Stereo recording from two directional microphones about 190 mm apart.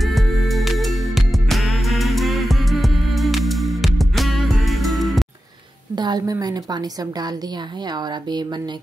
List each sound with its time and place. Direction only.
0.0 s music: centre (ahead or behind)
5.9 s a woman's voice: 20° right (ahead or behind)